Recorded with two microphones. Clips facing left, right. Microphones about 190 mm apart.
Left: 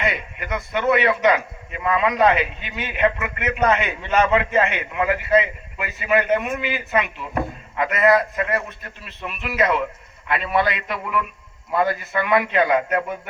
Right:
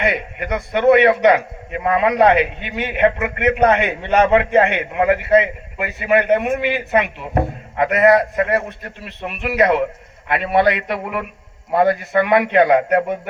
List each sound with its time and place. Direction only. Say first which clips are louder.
0.0 s a man's voice: right 5 dB; 60° right (ahead or behind)